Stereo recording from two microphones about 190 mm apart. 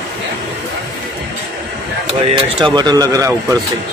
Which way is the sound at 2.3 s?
25° right (ahead or behind).